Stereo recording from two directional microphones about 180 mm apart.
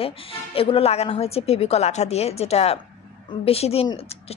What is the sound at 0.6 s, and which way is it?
A woman's voice, 30° left (ahead or behind).